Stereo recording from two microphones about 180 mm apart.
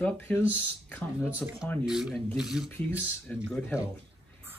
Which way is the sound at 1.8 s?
Centre (ahead or behind).